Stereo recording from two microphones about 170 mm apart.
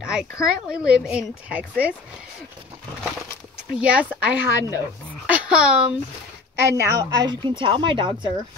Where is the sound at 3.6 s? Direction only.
5° right (ahead or behind).